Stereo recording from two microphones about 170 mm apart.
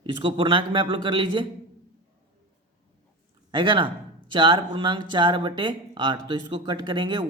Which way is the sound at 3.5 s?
30° right (ahead or behind).